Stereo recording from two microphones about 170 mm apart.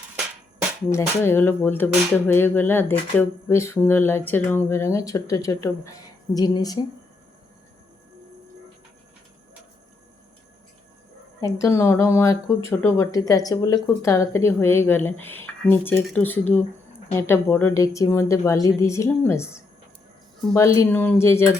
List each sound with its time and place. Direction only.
0.9 s speech: 15° left (ahead or behind)
11.3 s speech: 20° left (ahead or behind)